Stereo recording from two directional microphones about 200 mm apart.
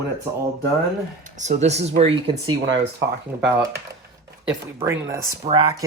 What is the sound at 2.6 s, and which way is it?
Speech, 65° right (ahead or behind).